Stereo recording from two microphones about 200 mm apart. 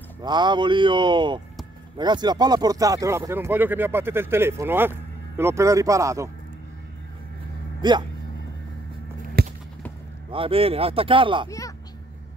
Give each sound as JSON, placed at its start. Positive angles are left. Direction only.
{"t": 0.2, "sound": "speech", "side_deg": -20}
{"t": 7.8, "sound": "speech", "side_deg": -20}
{"t": 9.4, "sound": "a sound", "side_deg": -50}
{"t": 10.3, "sound": "speech", "side_deg": -25}